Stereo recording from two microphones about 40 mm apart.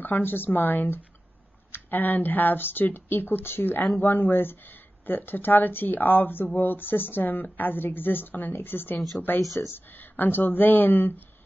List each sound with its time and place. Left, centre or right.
0.0 s speech: left
9.6 s speech: left
9.9 s speech: left